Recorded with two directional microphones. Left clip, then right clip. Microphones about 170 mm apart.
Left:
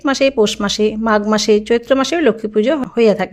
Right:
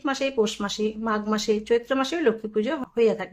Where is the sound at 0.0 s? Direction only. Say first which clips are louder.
Left 10 dB; 40° left (ahead or behind).